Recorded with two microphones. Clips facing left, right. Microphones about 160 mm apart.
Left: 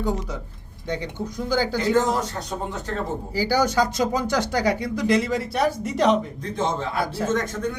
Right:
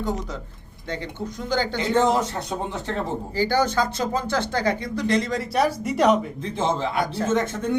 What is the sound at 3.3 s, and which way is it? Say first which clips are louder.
Speech: left 1 dB; 10° left (ahead or behind).